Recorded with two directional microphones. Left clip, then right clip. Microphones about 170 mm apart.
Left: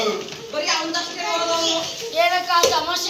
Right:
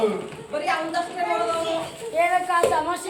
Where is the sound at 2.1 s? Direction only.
40° right (ahead or behind).